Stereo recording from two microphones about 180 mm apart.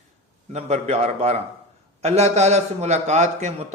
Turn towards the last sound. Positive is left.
turn(degrees=-40)  # may be behind; listen again after turning